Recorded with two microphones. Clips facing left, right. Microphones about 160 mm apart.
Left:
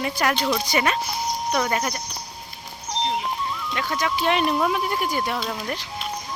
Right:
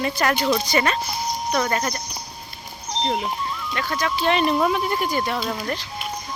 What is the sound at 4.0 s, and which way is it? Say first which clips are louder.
Speech: right 2 dB; 15° left (ahead or behind).